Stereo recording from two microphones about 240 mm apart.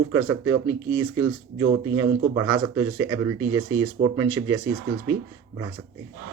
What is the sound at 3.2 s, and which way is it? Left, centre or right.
Speech, centre.